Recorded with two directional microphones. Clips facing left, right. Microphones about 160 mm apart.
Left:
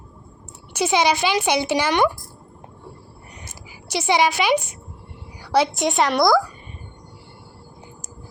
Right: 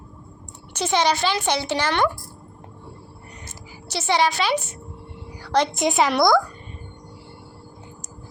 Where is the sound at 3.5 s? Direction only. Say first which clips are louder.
Left 5 dB; 10° left (ahead or behind).